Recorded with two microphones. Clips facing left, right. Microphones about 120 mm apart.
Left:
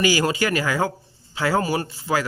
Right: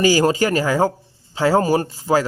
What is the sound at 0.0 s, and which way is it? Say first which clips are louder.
Speech: right 5 dB; 35° right (ahead or behind).